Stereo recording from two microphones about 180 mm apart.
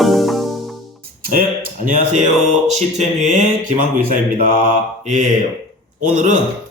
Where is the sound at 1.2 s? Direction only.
50° right (ahead or behind).